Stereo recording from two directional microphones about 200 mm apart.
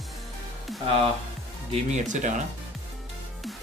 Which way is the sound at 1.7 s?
35° right (ahead or behind).